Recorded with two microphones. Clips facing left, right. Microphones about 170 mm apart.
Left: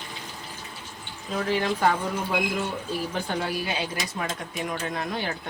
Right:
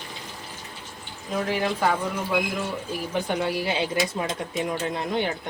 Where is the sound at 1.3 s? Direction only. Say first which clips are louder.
Right 2 dB; 15° right (ahead or behind).